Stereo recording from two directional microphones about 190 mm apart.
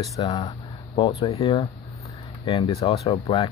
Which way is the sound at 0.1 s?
20° left (ahead or behind).